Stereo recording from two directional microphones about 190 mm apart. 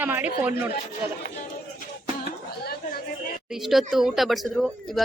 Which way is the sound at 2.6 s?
55° left (ahead or behind).